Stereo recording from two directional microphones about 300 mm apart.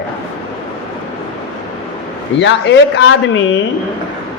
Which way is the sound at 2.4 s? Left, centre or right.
Left.